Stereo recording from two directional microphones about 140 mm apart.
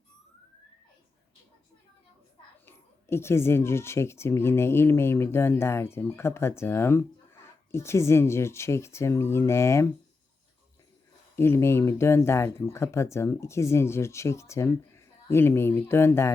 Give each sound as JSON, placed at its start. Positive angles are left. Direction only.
{"t": 2.6, "sound": "speech", "side_deg": 15}
{"t": 11.3, "sound": "speech", "side_deg": 20}